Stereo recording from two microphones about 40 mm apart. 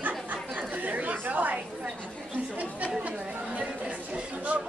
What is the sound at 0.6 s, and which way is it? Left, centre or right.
Chatter, right.